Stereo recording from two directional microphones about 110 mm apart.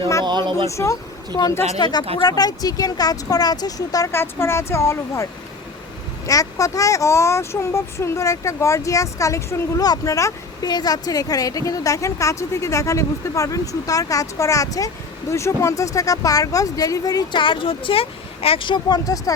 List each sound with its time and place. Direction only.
0.3 s speech: 45° right (ahead or behind)
0.7 s speech: 25° left (ahead or behind)
1.8 s speech: 40° left (ahead or behind)
4.1 s speech: 20° left (ahead or behind)
17.4 s speech: 50° left (ahead or behind); by 19.3 s 35° left (ahead or behind)